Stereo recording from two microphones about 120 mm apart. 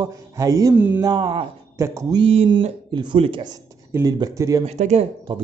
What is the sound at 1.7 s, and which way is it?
Speech, 25° right (ahead or behind).